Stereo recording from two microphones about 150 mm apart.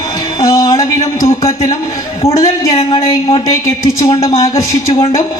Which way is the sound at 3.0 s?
30° left (ahead or behind).